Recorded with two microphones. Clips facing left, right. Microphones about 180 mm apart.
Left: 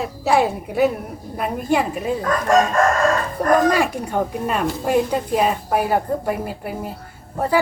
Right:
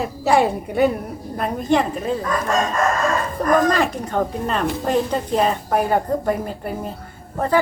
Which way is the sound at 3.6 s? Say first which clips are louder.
Left 1 dB; 10° left (ahead or behind).